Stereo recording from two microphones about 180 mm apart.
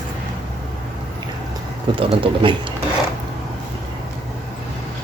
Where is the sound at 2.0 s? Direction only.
30° right (ahead or behind).